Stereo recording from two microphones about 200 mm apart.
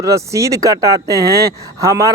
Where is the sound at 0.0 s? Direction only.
15° right (ahead or behind).